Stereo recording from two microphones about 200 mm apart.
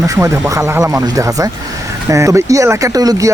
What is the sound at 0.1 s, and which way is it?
Speech, 15° right (ahead or behind).